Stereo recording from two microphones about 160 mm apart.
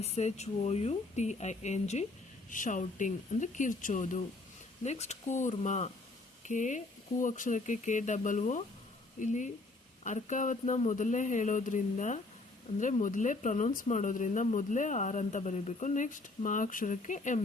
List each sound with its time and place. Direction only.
0.0 s speech: 40° left (ahead or behind)